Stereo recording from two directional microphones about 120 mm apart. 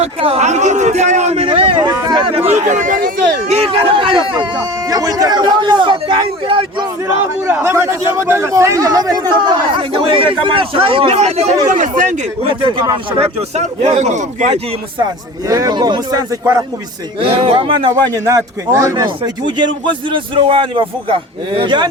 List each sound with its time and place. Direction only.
0.0 s a man's voice: 60° right (ahead or behind); by 2.2 s 35° right (ahead or behind)
2.3 s speech: 55° right (ahead or behind)
2.6 s speech: 90° right
3.5 s a man's voice: 55° right (ahead or behind)
4.9 s speech: 30° right (ahead or behind); by 6.8 s 45° right (ahead or behind)
7.4 s speech: 20° right (ahead or behind); by 11.4 s 65° right (ahead or behind)
11.7 s speech: 90° right
12.4 s a man's voice: 45° right (ahead or behind)
13.6 s speech: 70° right (ahead or behind)
15.4 s a man's voice: 30° right (ahead or behind)
17.2 s a man's voice: 50° right (ahead or behind)
18.3 s a man's voice: 25° right (ahead or behind)
19.0 s a man's voice: 40° right (ahead or behind)